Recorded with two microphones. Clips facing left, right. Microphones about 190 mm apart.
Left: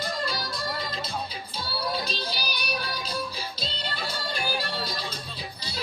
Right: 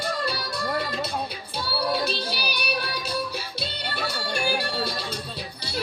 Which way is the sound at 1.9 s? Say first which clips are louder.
Right 5 dB; 65° right (ahead or behind).